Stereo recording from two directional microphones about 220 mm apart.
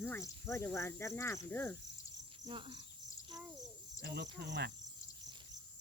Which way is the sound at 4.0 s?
45° right (ahead or behind).